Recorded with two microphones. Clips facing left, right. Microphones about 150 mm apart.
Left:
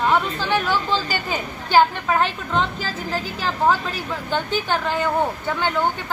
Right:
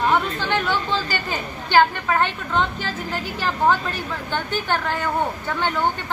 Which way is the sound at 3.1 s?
Centre (ahead or behind).